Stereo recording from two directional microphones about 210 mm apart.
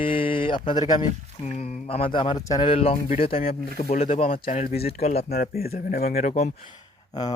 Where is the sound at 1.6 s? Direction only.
30° left (ahead or behind).